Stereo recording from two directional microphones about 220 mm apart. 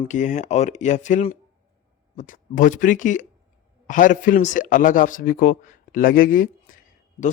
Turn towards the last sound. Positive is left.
turn(degrees=40)  # may be behind; listen again after turning